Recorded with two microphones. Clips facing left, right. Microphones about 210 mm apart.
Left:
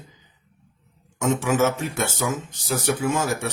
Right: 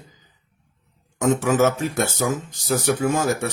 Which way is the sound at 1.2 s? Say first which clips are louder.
Right 3 dB; 35° right (ahead or behind).